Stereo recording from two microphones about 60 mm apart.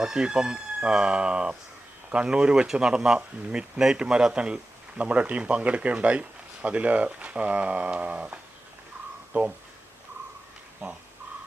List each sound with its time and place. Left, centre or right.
0.0 s speech: centre